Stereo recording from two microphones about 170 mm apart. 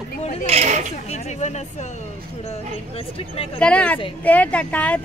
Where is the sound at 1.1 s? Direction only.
40° left (ahead or behind).